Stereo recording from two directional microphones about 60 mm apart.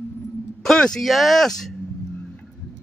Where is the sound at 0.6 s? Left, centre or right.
Centre.